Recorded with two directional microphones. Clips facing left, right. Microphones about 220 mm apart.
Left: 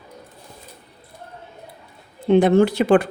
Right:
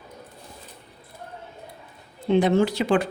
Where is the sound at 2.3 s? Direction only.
55° left (ahead or behind).